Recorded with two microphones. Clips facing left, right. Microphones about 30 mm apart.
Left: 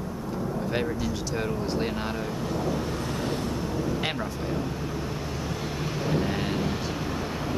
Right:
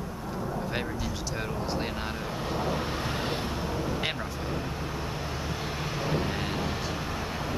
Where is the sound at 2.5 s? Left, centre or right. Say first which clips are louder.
Even; right.